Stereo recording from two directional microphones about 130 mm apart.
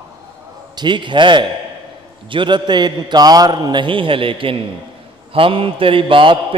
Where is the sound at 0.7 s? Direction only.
35° right (ahead or behind).